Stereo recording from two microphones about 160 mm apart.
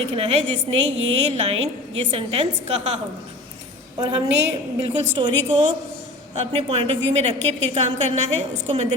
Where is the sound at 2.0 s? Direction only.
35° right (ahead or behind).